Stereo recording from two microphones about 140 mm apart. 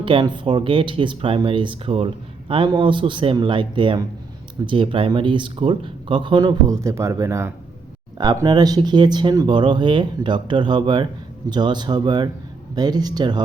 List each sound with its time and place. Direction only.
0.0 s speech: 40° right (ahead or behind)